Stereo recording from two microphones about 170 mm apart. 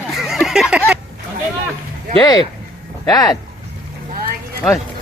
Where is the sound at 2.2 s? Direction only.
25° left (ahead or behind).